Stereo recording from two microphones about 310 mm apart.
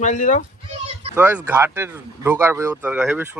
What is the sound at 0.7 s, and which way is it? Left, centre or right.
Speech, centre.